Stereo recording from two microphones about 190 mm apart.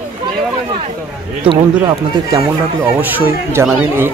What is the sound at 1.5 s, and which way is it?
Speech, 20° right (ahead or behind).